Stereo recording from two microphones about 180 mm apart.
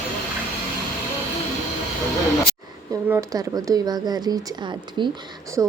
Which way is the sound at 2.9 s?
20° right (ahead or behind).